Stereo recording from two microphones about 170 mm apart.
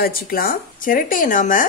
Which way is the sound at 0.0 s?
60° left (ahead or behind).